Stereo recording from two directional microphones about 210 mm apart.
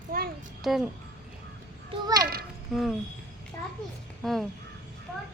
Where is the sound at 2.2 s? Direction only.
45° right (ahead or behind).